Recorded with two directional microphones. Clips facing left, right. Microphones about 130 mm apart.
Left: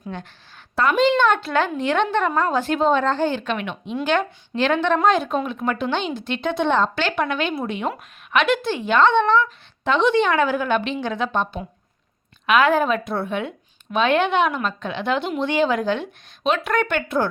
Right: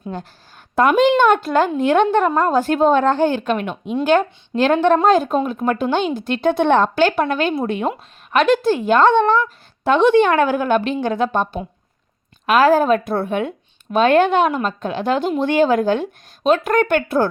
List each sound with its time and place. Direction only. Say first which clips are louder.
0.0 s a woman's voice: right 4 dB; 40° right (ahead or behind)
0.8 s a woman's voice: right 4 dB; 50° right (ahead or behind)